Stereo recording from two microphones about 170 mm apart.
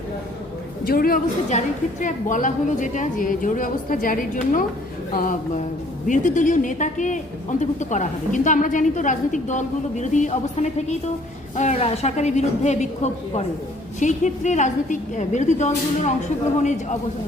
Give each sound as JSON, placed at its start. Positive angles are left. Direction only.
{"t": 0.9, "sound": "a woman's voice", "side_deg": 60}